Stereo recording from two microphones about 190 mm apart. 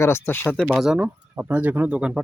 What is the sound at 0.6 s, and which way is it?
Speech, 5° right (ahead or behind).